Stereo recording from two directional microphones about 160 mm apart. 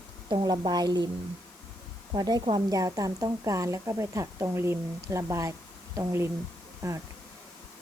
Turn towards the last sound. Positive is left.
turn(degrees=-20)  # may be behind; listen again after turning